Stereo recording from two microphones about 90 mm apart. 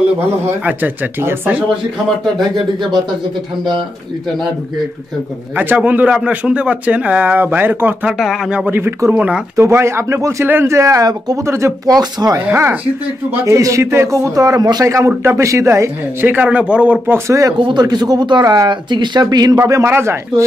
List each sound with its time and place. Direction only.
0.7 s speech: 20° right (ahead or behind)
5.6 s a man's voice: 20° right (ahead or behind); by 11.3 s 40° right (ahead or behind)
11.4 s speech: 30° right (ahead or behind)
11.9 s speech: 45° right (ahead or behind)
12.4 s speech: 25° right (ahead or behind)
13.6 s speech: 35° right (ahead or behind)
16.4 s a man's voice: 15° right (ahead or behind)
17.3 s speech: 35° right (ahead or behind)
17.6 s speech: 55° right (ahead or behind)
18.4 s speech: 40° right (ahead or behind)
18.7 s speech: 60° right (ahead or behind)
19.6 s speech: 30° right (ahead or behind)